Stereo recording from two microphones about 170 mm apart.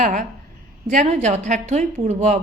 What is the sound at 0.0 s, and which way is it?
A woman's voice, 45° right (ahead or behind).